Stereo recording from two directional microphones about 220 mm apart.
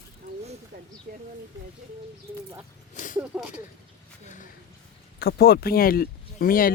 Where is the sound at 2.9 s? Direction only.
35° left (ahead or behind).